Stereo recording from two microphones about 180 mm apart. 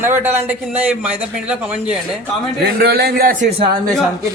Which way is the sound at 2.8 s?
60° right (ahead or behind).